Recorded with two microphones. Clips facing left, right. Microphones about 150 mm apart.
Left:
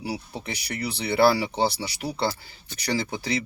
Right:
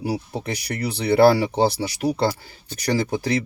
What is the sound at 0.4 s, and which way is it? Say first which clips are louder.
Speech: right 4 dB; 50° right (ahead or behind).